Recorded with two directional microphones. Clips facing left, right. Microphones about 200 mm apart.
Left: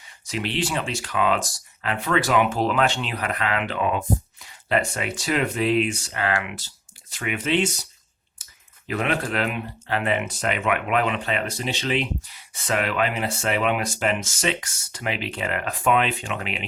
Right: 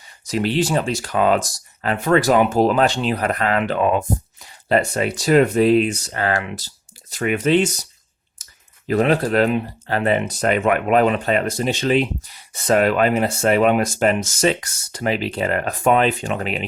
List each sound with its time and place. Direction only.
0.3 s speech: 40° right (ahead or behind)
8.9 s speech: 35° right (ahead or behind)